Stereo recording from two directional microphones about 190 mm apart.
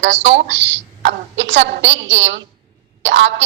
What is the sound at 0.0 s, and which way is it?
A woman's voice, 75° right (ahead or behind).